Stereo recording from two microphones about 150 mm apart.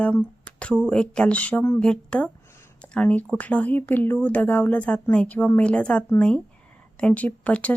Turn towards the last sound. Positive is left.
turn(degrees=10)  # may be behind; listen again after turning